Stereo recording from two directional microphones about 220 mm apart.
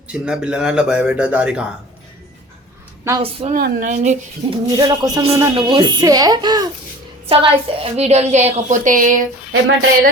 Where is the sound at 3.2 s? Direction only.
25° right (ahead or behind).